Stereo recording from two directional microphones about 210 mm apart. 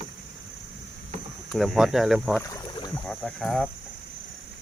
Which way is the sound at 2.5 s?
15° left (ahead or behind).